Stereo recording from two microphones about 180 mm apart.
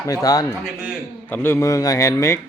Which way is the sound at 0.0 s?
20° left (ahead or behind).